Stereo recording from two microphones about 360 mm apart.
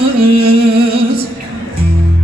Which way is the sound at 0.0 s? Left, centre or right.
Right.